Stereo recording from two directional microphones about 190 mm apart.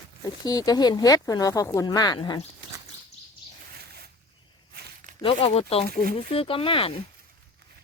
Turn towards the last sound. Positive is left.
turn(degrees=30)  # may be behind; listen again after turning